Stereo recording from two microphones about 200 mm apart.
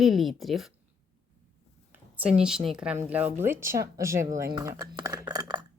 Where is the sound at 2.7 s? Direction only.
5° right (ahead or behind).